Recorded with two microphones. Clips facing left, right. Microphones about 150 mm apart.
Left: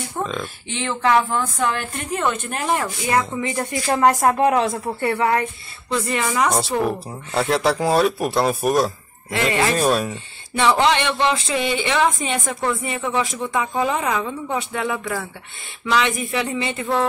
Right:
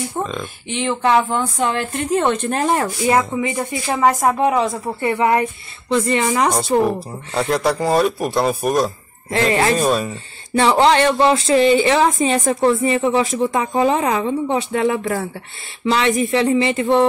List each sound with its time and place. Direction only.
0.2 s speech: centre (ahead or behind)
0.7 s a woman's voice: 20° right (ahead or behind); by 2.9 s 35° right (ahead or behind)
3.3 s speech: 10° right (ahead or behind)
5.0 s speech: 15° right (ahead or behind)
5.9 s speech: 30° right (ahead or behind)
6.7 s a woman's voice: 25° right (ahead or behind)
7.3 s speech: centre (ahead or behind)
9.3 s a woman's voice: 30° right (ahead or behind)
9.8 s speech: 5° left (ahead or behind)
10.6 s a woman's voice: 35° right (ahead or behind)